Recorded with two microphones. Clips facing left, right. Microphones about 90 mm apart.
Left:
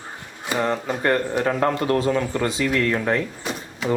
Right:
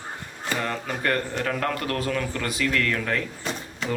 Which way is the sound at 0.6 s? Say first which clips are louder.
Left 7 dB; 25° left (ahead or behind).